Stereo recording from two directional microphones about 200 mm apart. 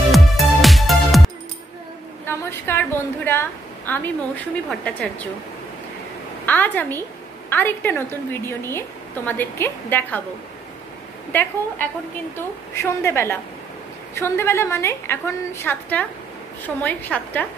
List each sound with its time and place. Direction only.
0.1 s music: centre (ahead or behind)
2.2 s a sound: 10° left (ahead or behind)
4.6 s speech: 5° left (ahead or behind)
6.4 s a woman's voice: 10° left (ahead or behind)
12.7 s a woman's voice: 15° left (ahead or behind)